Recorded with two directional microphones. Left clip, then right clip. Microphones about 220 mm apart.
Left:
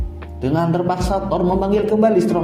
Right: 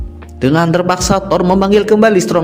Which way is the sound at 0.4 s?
45° right (ahead or behind).